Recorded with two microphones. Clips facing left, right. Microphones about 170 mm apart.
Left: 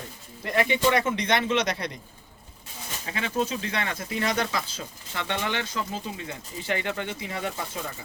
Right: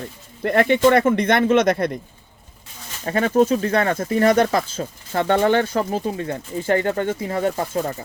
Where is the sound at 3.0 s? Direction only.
50° right (ahead or behind).